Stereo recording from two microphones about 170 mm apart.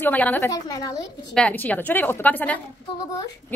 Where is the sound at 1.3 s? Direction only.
5° left (ahead or behind).